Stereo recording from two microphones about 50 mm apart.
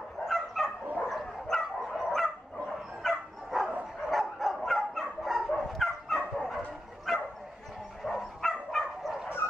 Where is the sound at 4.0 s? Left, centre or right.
Centre.